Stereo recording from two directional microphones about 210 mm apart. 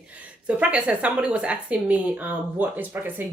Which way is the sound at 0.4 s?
5° right (ahead or behind).